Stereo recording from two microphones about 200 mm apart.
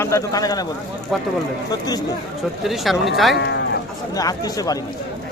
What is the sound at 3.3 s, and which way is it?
Speech, 55° left (ahead or behind).